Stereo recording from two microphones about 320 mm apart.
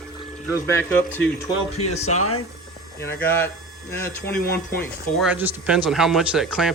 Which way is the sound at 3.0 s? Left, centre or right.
Centre.